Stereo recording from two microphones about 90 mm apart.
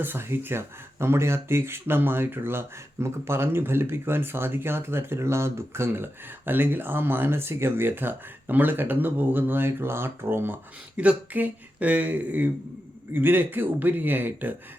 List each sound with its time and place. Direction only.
0.0 s speech: 25° right (ahead or behind)